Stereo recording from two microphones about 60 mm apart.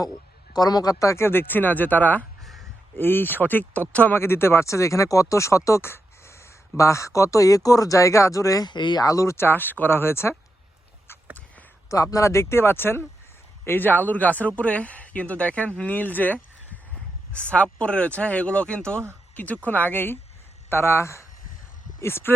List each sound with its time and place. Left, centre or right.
0.5 s a man's voice: left
1.1 s speech: left
2.4 s a sound: centre
3.0 s speech: left
4.1 s speech: left
12.1 s speech: left; by 19.0 s centre
19.6 s speech: left
20.7 s speech: left